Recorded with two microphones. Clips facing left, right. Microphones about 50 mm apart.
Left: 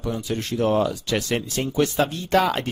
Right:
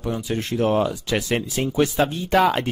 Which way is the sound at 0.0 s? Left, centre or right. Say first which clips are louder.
Right 1 dB; centre.